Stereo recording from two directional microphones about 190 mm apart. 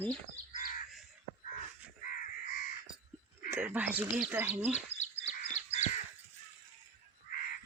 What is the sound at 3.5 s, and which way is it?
Speech, 10° right (ahead or behind).